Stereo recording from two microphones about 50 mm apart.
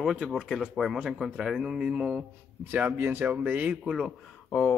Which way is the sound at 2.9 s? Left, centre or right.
Right.